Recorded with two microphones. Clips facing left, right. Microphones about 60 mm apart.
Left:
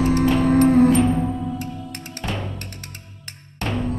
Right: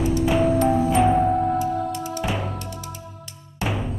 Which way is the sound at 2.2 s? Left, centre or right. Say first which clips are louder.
Even; centre.